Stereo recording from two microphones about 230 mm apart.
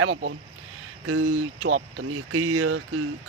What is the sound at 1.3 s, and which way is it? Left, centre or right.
Speech, right.